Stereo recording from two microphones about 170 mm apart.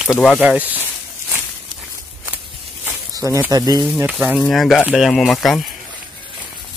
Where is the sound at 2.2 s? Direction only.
10° right (ahead or behind).